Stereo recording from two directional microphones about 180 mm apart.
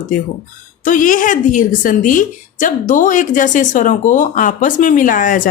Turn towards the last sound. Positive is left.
turn(degrees=50)  # may be behind; listen again after turning